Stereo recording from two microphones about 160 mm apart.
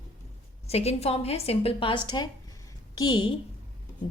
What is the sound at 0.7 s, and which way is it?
A woman's voice, 40° left (ahead or behind).